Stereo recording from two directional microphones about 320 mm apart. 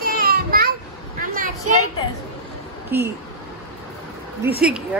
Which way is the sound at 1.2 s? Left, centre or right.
Right.